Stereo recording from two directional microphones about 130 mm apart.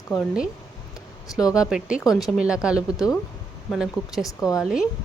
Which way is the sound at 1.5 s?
5° right (ahead or behind).